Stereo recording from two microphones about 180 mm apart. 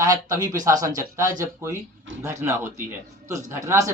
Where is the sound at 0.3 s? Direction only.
20° right (ahead or behind).